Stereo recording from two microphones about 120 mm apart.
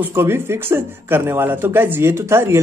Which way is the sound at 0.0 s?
20° right (ahead or behind).